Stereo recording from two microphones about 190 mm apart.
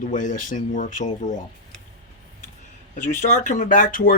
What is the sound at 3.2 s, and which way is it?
Speech, 40° left (ahead or behind).